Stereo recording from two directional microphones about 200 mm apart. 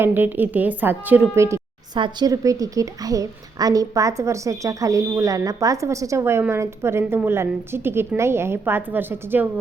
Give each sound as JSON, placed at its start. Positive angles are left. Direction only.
{"t": 0.0, "sound": "a woman's voice", "side_deg": -10}